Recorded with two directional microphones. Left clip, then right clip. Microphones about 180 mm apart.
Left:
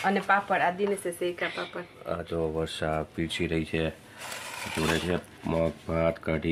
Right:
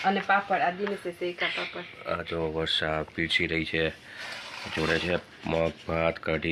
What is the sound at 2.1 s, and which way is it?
Speech, centre (ahead or behind).